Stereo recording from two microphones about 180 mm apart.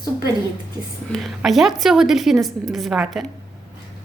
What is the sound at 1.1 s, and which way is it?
A woman's voice, centre (ahead or behind).